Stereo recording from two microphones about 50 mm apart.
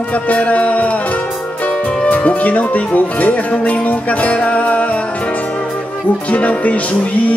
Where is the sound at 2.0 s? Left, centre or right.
Left.